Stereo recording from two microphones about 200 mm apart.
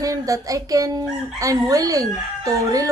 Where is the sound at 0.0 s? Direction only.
15° right (ahead or behind).